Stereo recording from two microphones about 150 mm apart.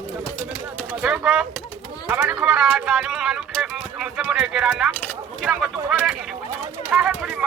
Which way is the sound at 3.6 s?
5° right (ahead or behind).